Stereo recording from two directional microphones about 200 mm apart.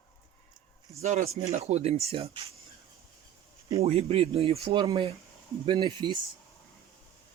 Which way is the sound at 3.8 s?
30° right (ahead or behind).